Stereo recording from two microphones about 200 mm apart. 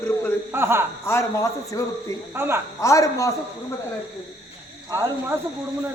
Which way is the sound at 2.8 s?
15° left (ahead or behind).